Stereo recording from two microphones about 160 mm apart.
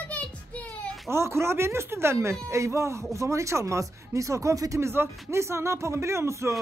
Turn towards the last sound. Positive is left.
turn(degrees=-15)  # may be behind; listen again after turning